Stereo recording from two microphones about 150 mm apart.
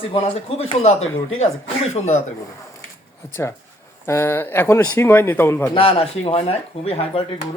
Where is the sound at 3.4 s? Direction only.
15° left (ahead or behind).